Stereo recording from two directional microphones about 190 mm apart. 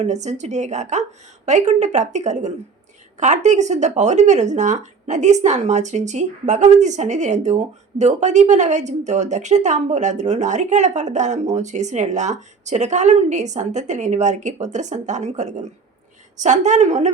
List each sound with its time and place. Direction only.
0.0 s speech: 35° right (ahead or behind)